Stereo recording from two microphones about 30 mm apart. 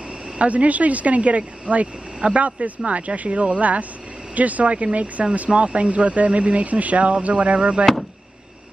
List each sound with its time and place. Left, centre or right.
0.4 s speech: right